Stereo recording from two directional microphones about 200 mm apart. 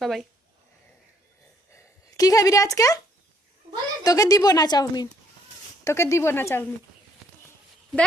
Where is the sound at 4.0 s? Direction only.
20° left (ahead or behind).